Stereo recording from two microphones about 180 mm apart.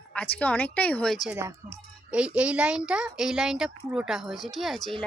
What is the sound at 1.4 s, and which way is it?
A woman's voice, 15° right (ahead or behind).